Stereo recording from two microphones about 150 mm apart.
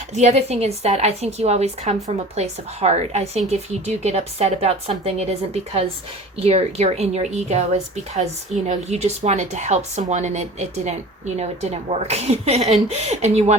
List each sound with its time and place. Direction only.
0.1 s a woman's voice: 50° right (ahead or behind)
6.4 s a woman's voice: 40° right (ahead or behind)